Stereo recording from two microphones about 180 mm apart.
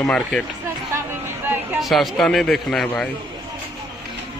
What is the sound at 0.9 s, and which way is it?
Music, 10° right (ahead or behind).